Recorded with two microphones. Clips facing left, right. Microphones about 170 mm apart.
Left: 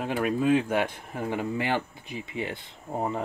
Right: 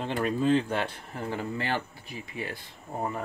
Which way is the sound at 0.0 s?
10° left (ahead or behind).